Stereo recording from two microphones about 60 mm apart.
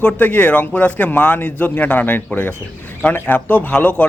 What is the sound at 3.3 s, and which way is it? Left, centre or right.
Speech, left.